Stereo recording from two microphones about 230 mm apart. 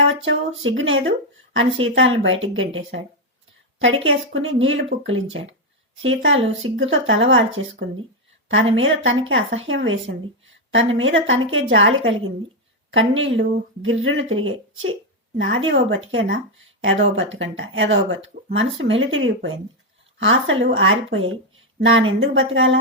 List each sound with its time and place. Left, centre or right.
0.3 s speech: right
2.2 s speech: right